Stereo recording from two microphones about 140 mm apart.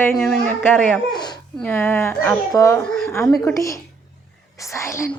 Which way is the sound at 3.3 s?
5° left (ahead or behind).